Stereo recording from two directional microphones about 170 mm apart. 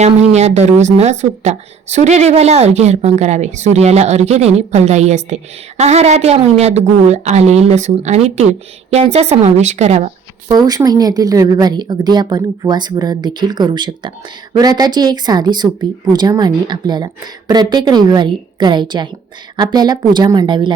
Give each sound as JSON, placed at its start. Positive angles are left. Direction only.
{"t": 0.3, "sound": "a woman's voice", "side_deg": -40}
{"t": 10.5, "sound": "speech", "side_deg": -20}